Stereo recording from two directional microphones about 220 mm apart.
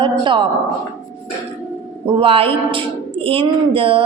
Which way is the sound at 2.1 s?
25° right (ahead or behind).